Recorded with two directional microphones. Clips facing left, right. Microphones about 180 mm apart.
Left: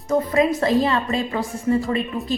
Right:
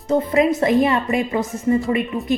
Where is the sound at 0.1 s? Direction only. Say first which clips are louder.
Right 2 dB; 25° right (ahead or behind).